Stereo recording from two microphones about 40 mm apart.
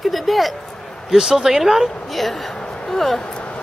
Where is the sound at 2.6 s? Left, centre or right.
Left.